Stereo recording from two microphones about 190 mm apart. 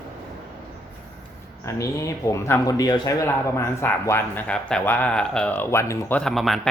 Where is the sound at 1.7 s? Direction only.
15° left (ahead or behind).